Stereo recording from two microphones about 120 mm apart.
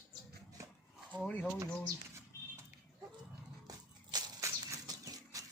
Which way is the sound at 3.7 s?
30° right (ahead or behind).